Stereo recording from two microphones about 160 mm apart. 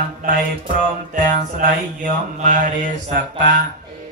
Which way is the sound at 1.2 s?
55° right (ahead or behind).